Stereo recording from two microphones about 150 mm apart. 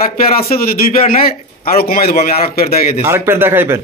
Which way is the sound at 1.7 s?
80° left.